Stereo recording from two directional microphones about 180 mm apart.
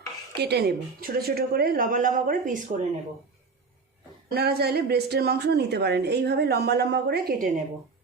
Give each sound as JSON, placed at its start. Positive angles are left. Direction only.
{"t": 0.3, "sound": "a woman's voice", "side_deg": -65}
{"t": 4.3, "sound": "speech", "side_deg": -60}